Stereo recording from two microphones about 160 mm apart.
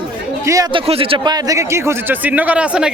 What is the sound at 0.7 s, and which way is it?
Speech, 35° right (ahead or behind).